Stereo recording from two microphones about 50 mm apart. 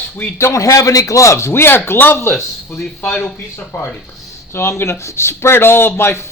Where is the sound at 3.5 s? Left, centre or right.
Left.